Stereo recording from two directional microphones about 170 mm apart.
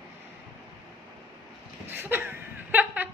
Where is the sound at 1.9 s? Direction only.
10° right (ahead or behind).